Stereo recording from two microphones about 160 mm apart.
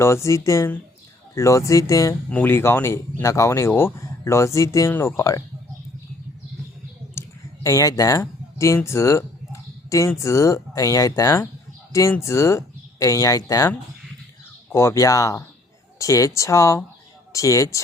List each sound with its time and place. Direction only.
0.0 s speech: 15° left (ahead or behind)
7.2 s speech: 20° left (ahead or behind)